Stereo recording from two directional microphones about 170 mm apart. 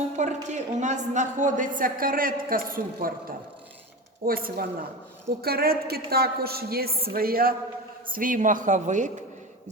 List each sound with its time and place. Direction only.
0.2 s a woman's voice: 45° right (ahead or behind)